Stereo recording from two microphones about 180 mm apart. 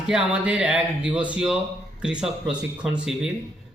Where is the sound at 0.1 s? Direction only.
5° right (ahead or behind).